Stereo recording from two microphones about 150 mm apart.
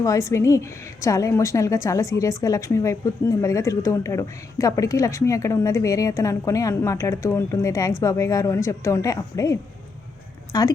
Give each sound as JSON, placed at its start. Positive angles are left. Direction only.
{"t": 0.0, "sound": "a woman's voice", "side_deg": 20}